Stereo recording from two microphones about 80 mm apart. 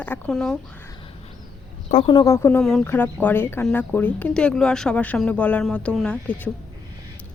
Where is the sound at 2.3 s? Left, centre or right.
Left.